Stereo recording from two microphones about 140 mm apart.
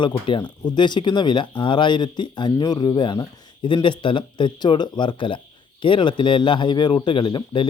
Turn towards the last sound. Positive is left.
turn(degrees=35)  # may be behind; listen again after turning